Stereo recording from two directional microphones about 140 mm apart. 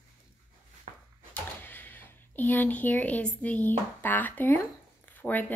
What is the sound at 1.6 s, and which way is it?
Speech, 15° left (ahead or behind).